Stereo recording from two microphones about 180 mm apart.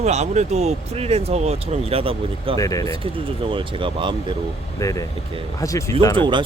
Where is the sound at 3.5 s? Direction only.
30° right (ahead or behind).